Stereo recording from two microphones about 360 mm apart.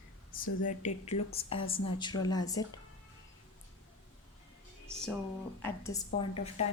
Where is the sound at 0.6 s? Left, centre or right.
Left.